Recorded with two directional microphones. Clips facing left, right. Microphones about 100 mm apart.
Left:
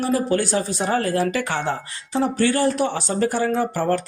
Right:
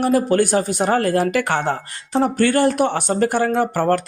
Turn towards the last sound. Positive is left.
turn(degrees=-60)  # may be behind; listen again after turning